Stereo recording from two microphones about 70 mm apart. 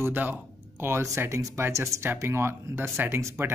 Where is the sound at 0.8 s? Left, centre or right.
Right.